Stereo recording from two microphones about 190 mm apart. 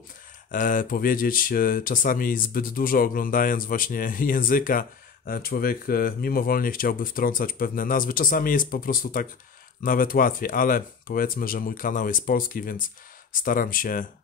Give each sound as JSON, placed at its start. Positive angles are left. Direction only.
{"t": 0.5, "sound": "speech", "side_deg": 45}